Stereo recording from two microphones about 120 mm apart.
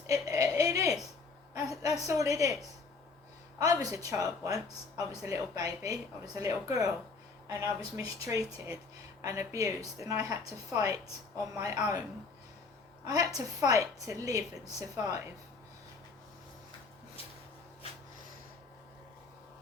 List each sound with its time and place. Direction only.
0.1 s a sound: 30° right (ahead or behind)
3.6 s speech: 30° right (ahead or behind)
13.1 s speech: 30° right (ahead or behind)